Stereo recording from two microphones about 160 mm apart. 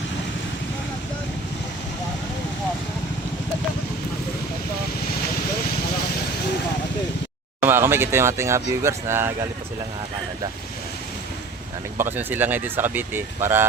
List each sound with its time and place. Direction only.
7.6 s speech: 15° right (ahead or behind)
11.9 s speech: 15° right (ahead or behind)